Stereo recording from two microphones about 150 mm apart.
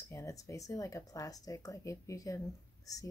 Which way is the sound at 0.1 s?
20° left (ahead or behind).